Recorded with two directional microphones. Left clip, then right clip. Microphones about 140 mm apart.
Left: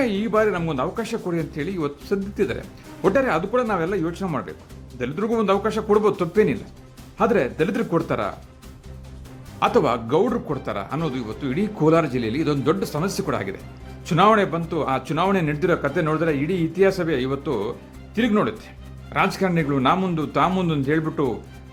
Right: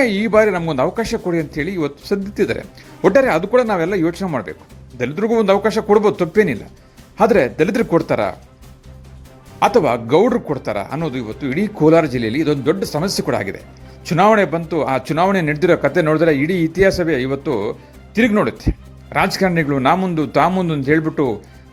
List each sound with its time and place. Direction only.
0.0 s speech: 30° right (ahead or behind)
9.6 s speech: 25° right (ahead or behind)
13.0 s speech: 30° right (ahead or behind)